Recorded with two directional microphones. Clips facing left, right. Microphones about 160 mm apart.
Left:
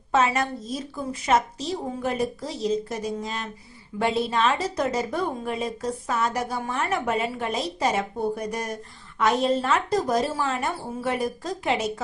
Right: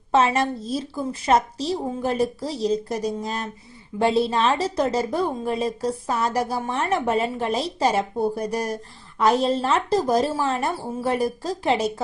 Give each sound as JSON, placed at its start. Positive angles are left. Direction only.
{"t": 0.1, "sound": "a woman's voice", "side_deg": -30}